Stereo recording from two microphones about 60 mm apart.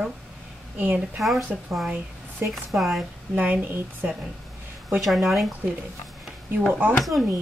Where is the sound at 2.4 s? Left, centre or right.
Right.